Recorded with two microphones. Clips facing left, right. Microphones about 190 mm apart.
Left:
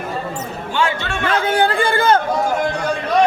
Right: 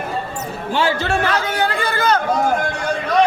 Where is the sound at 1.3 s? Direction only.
30° left (ahead or behind).